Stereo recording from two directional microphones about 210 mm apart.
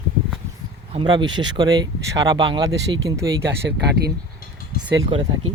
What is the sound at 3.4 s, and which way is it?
Speech, 55° right (ahead or behind).